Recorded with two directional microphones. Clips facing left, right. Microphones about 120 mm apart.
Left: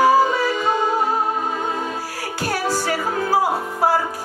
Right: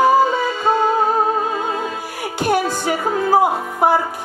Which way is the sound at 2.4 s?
20° right (ahead or behind).